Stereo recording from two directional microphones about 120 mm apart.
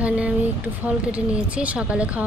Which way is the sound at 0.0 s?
10° right (ahead or behind).